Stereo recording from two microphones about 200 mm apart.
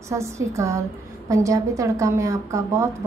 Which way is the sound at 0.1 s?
15° right (ahead or behind).